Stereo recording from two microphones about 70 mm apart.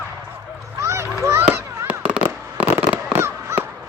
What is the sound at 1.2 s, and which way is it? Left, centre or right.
Children playing, right.